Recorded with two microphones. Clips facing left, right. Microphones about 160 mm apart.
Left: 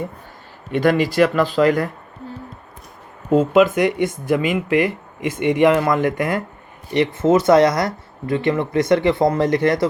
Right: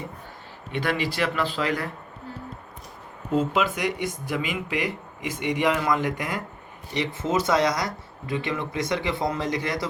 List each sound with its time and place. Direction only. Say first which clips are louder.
0.7 s speech: left 10 dB; 45° left (ahead or behind)
3.3 s speech: left 10 dB; 55° left (ahead or behind)